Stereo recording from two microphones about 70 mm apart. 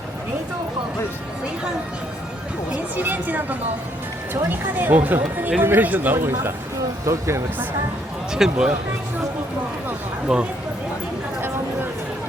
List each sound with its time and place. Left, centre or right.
2.7 s speech: right
6.1 s speech: right
8.3 s speech: centre
10.3 s speech: centre
11.3 s a sound: right